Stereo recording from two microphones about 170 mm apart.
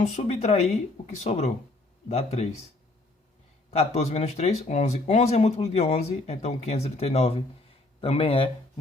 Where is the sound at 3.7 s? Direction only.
40° left (ahead or behind).